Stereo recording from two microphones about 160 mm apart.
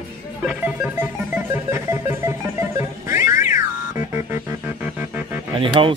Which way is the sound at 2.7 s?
20° right (ahead or behind).